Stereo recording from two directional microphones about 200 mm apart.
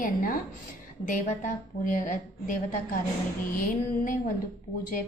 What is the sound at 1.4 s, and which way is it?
A woman's voice, 40° left (ahead or behind).